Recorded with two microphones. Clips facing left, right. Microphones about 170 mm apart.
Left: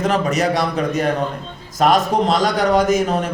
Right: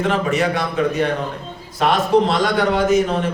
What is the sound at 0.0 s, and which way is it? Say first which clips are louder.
Speech: left 1 dB; 40° left (ahead or behind).